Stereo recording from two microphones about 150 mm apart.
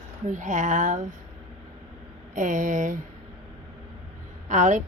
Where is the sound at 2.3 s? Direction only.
60° right (ahead or behind).